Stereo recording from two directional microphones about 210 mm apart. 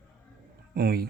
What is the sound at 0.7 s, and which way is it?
Speech, 50° right (ahead or behind).